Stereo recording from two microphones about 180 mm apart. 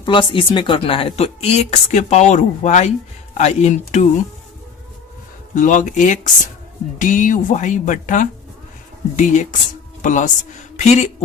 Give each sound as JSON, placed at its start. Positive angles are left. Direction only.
{"t": 0.0, "sound": "speech", "side_deg": 30}
{"t": 5.5, "sound": "speech", "side_deg": 45}